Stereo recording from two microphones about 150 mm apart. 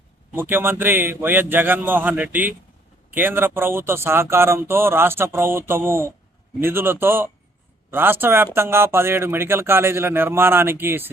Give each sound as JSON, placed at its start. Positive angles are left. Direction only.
{"t": 0.3, "sound": "speech", "side_deg": -15}